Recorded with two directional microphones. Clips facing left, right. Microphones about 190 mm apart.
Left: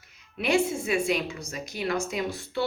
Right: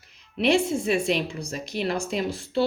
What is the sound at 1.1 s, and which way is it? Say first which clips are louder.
Speech: right 2 dB; 35° right (ahead or behind).